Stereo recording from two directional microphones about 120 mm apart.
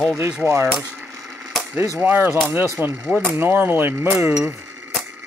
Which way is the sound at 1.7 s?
25° right (ahead or behind).